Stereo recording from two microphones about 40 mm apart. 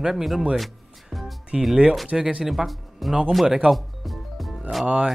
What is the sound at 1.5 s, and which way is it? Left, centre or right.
Speech, centre.